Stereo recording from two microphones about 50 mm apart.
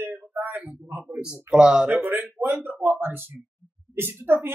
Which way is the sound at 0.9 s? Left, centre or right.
Right.